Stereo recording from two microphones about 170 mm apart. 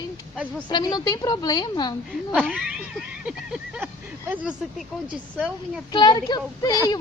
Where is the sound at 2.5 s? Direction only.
5° right (ahead or behind).